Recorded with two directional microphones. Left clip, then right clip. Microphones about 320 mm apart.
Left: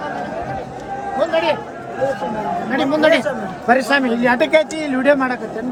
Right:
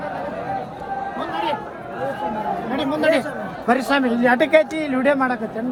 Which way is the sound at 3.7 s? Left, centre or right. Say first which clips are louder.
Left 4 dB; right.